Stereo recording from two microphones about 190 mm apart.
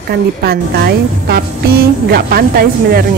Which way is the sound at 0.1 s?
55° right (ahead or behind).